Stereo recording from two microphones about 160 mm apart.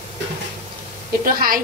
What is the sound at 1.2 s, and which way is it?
Speech, 60° right (ahead or behind).